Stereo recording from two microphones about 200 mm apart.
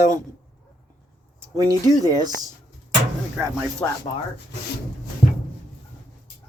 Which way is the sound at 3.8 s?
10° left (ahead or behind).